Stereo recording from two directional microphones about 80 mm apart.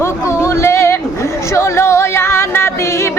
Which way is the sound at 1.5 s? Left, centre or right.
Left.